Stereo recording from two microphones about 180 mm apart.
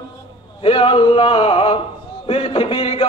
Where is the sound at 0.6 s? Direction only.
30° left (ahead or behind).